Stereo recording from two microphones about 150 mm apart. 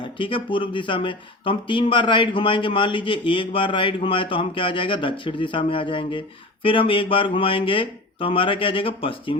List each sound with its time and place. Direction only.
0.0 s speech: 35° left (ahead or behind)